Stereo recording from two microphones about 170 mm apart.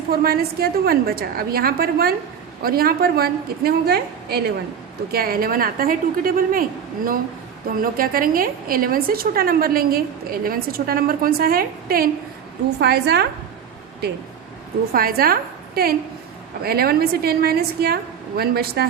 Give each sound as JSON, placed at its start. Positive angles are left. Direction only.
{"t": 0.1, "sound": "a woman's voice", "side_deg": -65}
{"t": 12.8, "sound": "a woman's voice", "side_deg": -75}
{"t": 14.9, "sound": "a woman's voice", "side_deg": -60}